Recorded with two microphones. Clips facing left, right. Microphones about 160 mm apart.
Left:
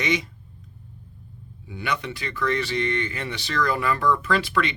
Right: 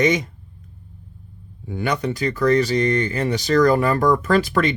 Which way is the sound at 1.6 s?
45° right (ahead or behind).